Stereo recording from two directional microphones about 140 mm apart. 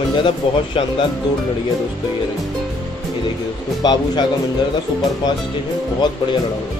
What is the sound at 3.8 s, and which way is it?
Speech, 30° left (ahead or behind).